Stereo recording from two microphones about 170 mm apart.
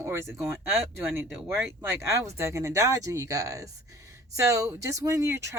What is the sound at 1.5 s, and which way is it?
A woman's voice, 15° right (ahead or behind).